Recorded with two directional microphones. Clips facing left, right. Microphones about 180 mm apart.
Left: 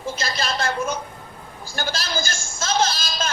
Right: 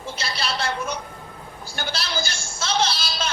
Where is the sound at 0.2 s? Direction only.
45° left (ahead or behind).